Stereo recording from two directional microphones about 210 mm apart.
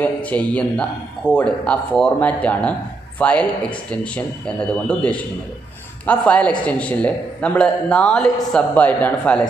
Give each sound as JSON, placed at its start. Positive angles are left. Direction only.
{"t": 0.0, "sound": "speech", "side_deg": 5}